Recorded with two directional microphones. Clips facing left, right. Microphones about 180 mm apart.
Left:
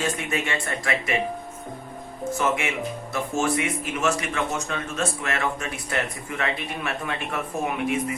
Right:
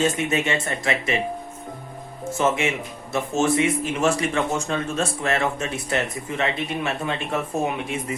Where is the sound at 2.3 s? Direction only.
25° right (ahead or behind).